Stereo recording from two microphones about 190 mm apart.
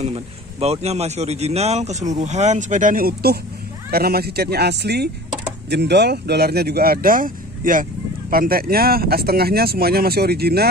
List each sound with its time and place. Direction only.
0.0 s speech: 35° right (ahead or behind); by 10.7 s 55° right (ahead or behind)